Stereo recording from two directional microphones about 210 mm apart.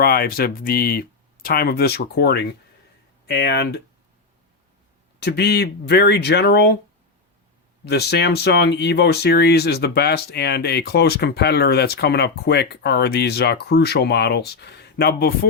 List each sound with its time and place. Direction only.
0.0 s speech: 45° left (ahead or behind)
5.2 s speech: 50° left (ahead or behind)
7.9 s speech: 50° left (ahead or behind)